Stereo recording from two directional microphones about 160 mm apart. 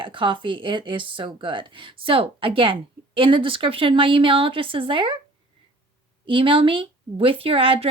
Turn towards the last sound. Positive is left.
turn(degrees=-35)  # may be behind; listen again after turning